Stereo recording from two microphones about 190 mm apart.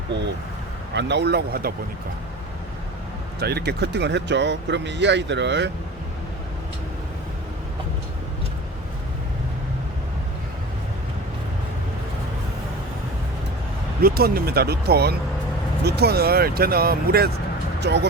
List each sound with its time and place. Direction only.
0.9 s speech: 65° right (ahead or behind)
3.4 s speech: 60° right (ahead or behind)
14.0 s speech: 50° right (ahead or behind)